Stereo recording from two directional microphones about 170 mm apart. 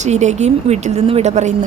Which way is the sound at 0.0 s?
45° right (ahead or behind).